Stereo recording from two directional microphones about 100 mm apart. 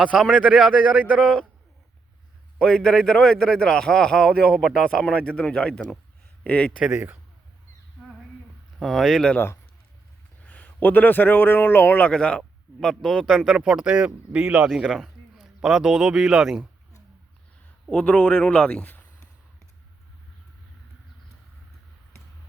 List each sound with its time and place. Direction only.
0.3 s speech: 10° right (ahead or behind)
2.6 s a man's voice: 5° left (ahead or behind)
6.7 s a man's voice: 5° right (ahead or behind)
6.9 s a man's voice: 20° right (ahead or behind)
8.8 s a man's voice: centre (ahead or behind)
10.4 s a man's voice: 15° left (ahead or behind); by 14.7 s 15° right (ahead or behind)
14.8 s speech: centre (ahead or behind)
17.9 s a man's voice: 10° left (ahead or behind)